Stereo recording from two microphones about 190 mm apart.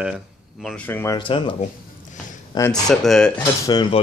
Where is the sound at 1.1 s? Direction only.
25° left (ahead or behind).